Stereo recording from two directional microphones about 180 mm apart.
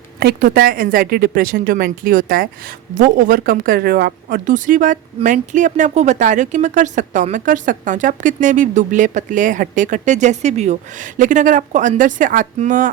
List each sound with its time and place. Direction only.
0.2 s speech: 55° right (ahead or behind)